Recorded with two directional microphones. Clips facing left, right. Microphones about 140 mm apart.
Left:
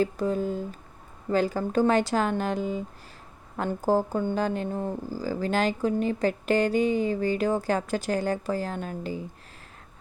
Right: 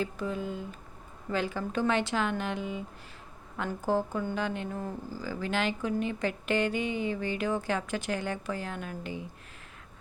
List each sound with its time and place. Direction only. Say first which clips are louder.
0.0 s speech: left 7 dB; 40° left (ahead or behind)